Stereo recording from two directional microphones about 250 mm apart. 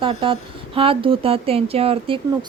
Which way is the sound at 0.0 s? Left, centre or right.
Right.